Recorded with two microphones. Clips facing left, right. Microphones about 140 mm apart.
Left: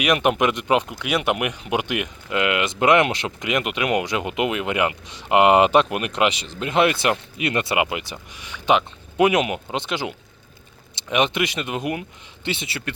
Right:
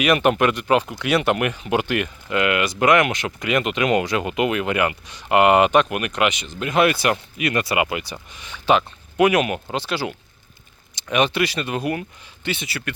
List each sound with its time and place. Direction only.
0.0 s speech: 10° left (ahead or behind); by 3.3 s 30° left (ahead or behind)
3.4 s speech: 15° left (ahead or behind)